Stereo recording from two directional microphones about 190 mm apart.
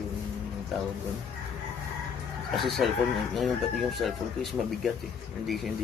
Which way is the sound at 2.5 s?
Centre (ahead or behind).